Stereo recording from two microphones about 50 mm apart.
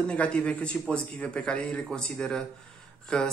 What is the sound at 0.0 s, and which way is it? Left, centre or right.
Speech, left.